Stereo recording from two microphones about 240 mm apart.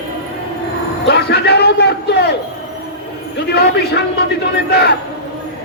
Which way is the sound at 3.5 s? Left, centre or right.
Left.